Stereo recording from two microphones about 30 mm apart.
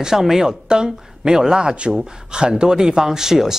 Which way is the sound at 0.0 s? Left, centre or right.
Centre.